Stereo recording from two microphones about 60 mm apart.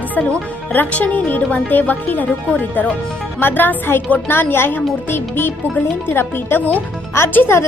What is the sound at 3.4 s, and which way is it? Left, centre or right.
Speech, left.